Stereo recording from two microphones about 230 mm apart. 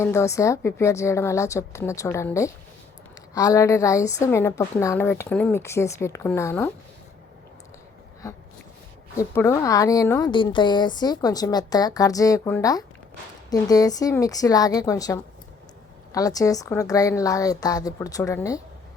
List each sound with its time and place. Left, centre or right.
0.0 s a woman's voice: centre
8.2 s a woman's voice: centre